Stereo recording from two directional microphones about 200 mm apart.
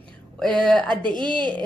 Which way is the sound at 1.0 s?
25° right (ahead or behind).